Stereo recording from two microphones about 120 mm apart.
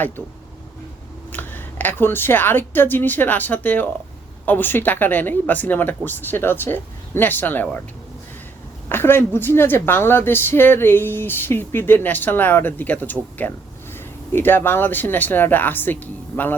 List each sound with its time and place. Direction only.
0.2 s a woman's voice: 15° left (ahead or behind)
8.9 s a woman's voice: 20° left (ahead or behind)